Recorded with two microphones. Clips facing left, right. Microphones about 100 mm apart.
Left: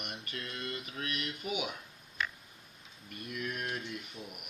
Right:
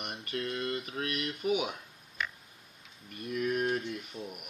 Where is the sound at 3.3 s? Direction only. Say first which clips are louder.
Right 8 dB; 45° right (ahead or behind).